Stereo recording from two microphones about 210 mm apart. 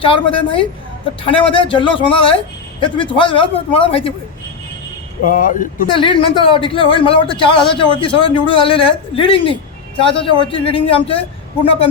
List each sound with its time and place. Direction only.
0.0 s a man's voice: 25° left (ahead or behind)
5.2 s speech: 40° left (ahead or behind)
5.9 s a man's voice: 25° left (ahead or behind)